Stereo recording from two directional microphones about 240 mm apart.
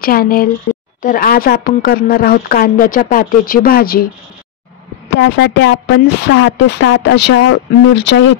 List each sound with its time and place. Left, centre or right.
0.0 s speech: left
5.1 s a woman's voice: left